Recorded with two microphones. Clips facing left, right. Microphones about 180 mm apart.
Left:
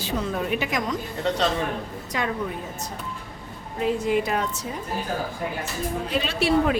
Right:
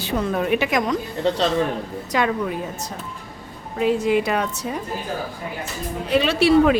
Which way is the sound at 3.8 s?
90° right.